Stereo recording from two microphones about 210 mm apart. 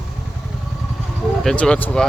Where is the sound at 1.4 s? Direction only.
5° left (ahead or behind).